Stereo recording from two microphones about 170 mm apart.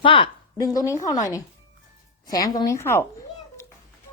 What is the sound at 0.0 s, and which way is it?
A woman's voice, 30° left (ahead or behind).